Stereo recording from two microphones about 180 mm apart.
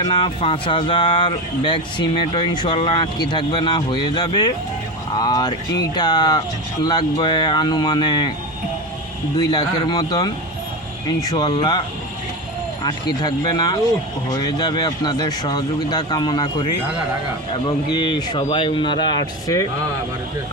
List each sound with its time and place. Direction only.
0.0 s speech: 25° left (ahead or behind)
9.4 s speech: 20° left (ahead or behind)
12.8 s speech: 20° left (ahead or behind)
18.1 s speech: 25° left (ahead or behind)